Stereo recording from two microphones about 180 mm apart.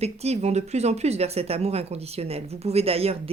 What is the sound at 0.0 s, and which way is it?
Speech, 35° right (ahead or behind).